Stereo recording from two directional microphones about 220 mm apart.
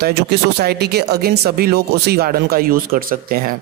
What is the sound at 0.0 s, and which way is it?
A man's voice, 45° right (ahead or behind).